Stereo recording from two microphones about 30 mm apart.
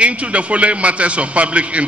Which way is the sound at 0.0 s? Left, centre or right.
Right.